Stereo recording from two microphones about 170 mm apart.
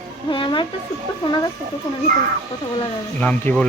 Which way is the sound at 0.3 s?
30° left (ahead or behind).